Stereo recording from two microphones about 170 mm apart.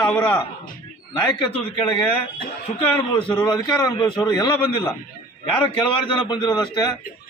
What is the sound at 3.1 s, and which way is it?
Speech, 30° left (ahead or behind).